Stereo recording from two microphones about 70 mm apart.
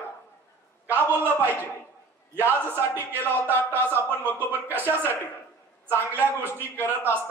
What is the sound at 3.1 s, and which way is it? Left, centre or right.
Speech, right.